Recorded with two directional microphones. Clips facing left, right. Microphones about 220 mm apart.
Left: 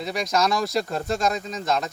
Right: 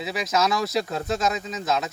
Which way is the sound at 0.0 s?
5° right (ahead or behind).